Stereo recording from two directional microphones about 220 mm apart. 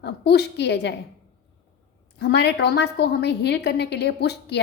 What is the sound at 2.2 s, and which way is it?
A woman's voice, 50° left (ahead or behind).